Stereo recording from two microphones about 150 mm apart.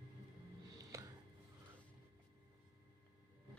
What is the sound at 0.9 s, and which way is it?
Music, 20° right (ahead or behind).